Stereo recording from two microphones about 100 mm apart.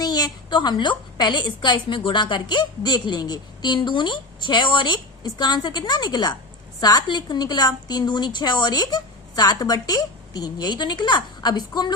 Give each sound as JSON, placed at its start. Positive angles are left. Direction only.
{"t": 0.0, "sound": "a woman's voice", "side_deg": 40}